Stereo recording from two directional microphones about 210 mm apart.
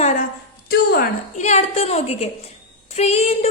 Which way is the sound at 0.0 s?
35° left (ahead or behind).